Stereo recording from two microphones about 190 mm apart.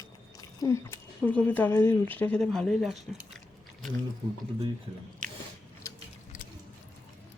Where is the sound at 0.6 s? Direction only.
15° left (ahead or behind).